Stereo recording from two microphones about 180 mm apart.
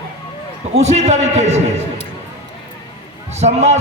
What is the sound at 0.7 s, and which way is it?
Speech, 35° right (ahead or behind).